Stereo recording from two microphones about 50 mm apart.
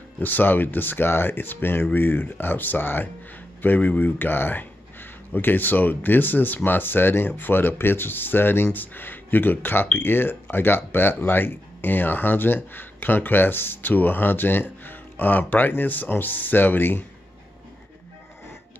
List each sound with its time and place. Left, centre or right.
0.2 s speech: left
3.6 s speech: left